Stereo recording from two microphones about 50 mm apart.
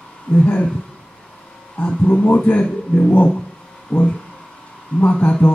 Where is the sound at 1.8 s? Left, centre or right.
Left.